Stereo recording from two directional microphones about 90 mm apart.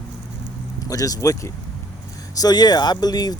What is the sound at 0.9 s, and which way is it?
Speech, 40° left (ahead or behind).